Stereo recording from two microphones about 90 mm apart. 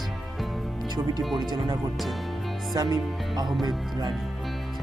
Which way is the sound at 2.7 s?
50° right (ahead or behind).